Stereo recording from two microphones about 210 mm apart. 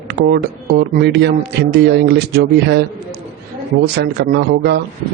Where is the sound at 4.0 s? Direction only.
50° right (ahead or behind).